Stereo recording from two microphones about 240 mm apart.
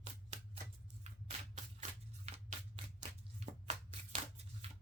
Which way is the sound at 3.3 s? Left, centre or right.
Right.